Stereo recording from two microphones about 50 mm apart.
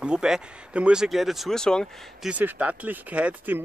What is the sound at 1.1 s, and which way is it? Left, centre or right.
Speech, centre.